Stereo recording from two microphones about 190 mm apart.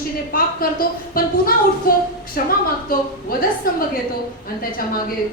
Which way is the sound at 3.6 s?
50° left (ahead or behind).